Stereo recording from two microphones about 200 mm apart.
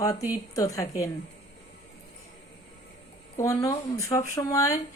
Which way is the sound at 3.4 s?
15° left (ahead or behind).